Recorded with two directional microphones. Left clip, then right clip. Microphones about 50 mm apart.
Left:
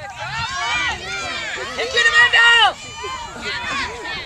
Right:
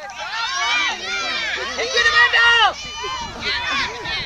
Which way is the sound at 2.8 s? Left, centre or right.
Right.